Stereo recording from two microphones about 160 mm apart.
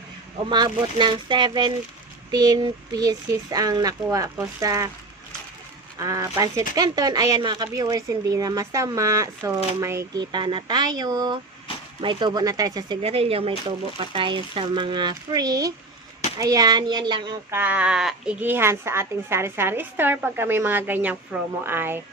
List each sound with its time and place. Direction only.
0.5 s speech: 25° right (ahead or behind)
6.0 s speech: 20° right (ahead or behind)
11.7 s vehicle: 35° left (ahead or behind)
12.0 s speech: 25° right (ahead or behind)
13.0 s speech: 35° right (ahead or behind)
17.5 s speech: 10° right (ahead or behind)